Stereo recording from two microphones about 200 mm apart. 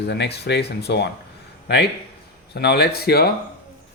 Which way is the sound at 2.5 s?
55° left (ahead or behind).